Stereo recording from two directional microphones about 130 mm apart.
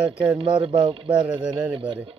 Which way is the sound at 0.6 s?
40° right (ahead or behind).